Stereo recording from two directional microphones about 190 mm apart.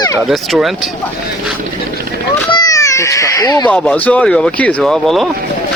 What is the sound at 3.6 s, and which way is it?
Speech, 5° left (ahead or behind).